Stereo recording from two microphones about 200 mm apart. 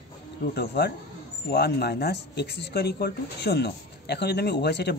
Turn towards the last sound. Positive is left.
turn(degrees=55)  # may be behind; listen again after turning